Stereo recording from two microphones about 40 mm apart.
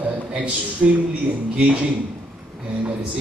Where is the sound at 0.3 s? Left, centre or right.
Right.